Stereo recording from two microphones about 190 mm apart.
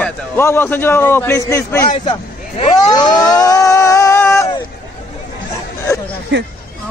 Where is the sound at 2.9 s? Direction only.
20° left (ahead or behind).